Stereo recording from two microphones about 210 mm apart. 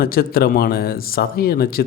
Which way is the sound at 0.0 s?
45° left (ahead or behind).